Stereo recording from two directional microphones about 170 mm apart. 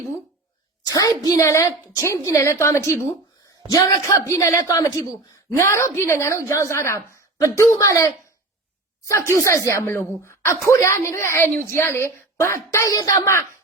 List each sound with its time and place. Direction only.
0.9 s a woman's voice: 20° left (ahead or behind)